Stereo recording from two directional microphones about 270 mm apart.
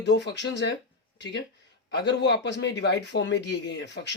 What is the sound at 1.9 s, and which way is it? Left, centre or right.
A man's voice, left.